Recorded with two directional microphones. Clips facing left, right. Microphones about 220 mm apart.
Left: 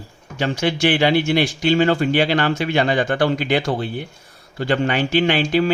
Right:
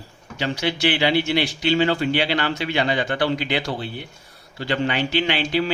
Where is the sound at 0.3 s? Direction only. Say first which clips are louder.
Left 4 dB; 50° left (ahead or behind).